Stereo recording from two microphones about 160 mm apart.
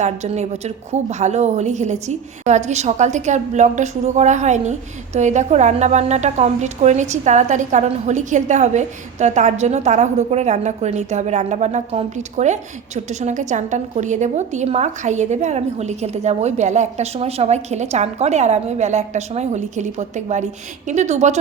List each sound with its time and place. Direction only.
0.0 s a woman's voice: 45° right (ahead or behind)